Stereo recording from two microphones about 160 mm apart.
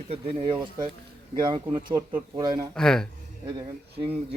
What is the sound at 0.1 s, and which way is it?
Speech, 35° right (ahead or behind).